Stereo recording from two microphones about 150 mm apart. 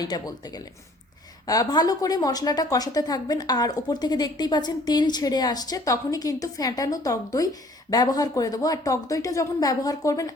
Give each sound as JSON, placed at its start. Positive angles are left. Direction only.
{"t": 0.0, "sound": "speech", "side_deg": 25}